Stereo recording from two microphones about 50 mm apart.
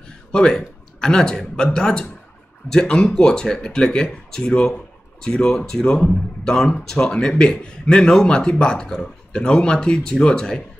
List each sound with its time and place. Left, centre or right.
0.3 s speech: centre